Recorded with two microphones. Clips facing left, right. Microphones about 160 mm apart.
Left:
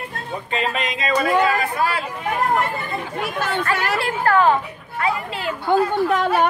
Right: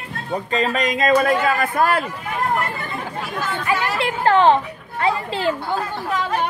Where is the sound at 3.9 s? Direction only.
20° right (ahead or behind).